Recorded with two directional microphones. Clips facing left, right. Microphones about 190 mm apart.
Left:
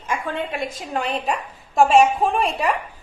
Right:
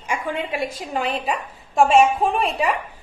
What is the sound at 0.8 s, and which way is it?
A woman's voice, centre (ahead or behind).